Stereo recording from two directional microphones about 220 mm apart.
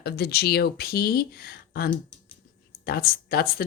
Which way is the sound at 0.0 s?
45° left (ahead or behind).